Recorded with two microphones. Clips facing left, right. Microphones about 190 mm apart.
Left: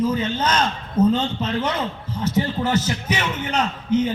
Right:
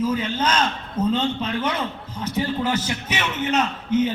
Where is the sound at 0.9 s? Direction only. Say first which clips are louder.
Left 4 dB; 10° left (ahead or behind).